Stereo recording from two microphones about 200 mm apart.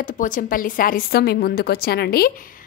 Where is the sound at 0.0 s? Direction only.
40° left (ahead or behind).